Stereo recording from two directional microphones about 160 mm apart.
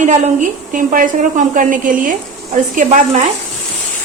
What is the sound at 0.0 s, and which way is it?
A woman's voice, 50° right (ahead or behind).